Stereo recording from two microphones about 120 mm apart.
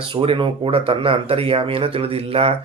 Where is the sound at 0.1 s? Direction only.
45° right (ahead or behind).